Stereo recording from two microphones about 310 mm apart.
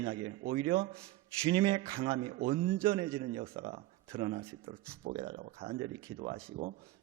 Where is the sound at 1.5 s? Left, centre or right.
Centre.